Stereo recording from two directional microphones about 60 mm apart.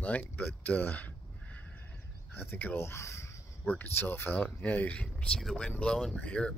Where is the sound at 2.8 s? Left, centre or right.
Left.